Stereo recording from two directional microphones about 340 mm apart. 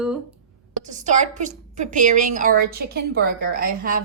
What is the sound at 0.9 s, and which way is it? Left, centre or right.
A woman's voice, right.